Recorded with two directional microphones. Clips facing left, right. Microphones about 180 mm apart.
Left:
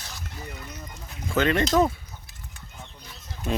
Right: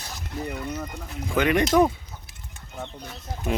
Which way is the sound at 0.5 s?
70° right (ahead or behind).